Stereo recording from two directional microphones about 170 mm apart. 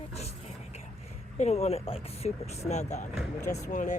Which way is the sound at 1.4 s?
40° left (ahead or behind).